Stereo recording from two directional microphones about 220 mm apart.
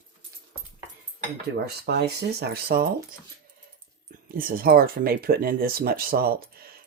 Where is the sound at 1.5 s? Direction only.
50° right (ahead or behind).